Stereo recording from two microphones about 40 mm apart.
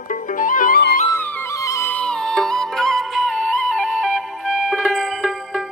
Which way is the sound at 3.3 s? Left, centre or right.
Left.